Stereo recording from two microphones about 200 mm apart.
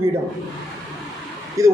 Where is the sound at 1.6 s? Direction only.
15° right (ahead or behind).